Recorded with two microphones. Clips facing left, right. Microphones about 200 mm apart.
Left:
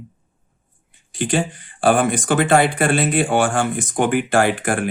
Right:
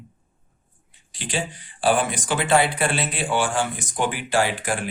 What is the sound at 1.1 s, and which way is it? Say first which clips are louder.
Speech: left 8 dB; 50° left (ahead or behind).